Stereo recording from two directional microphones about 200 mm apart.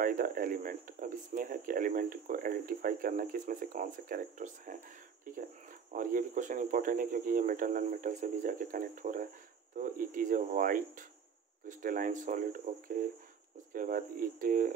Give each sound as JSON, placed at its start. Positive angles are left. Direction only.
{"t": 0.0, "sound": "speech", "side_deg": -45}